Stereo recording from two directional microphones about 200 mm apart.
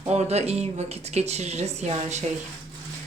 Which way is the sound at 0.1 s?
30° right (ahead or behind).